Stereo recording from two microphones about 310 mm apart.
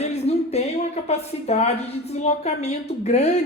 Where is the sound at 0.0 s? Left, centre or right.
Left.